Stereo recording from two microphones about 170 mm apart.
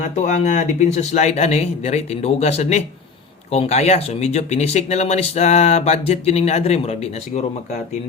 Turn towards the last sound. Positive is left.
turn(degrees=40)  # may be behind; listen again after turning